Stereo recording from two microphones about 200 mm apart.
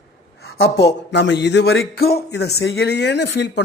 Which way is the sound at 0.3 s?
50° left (ahead or behind).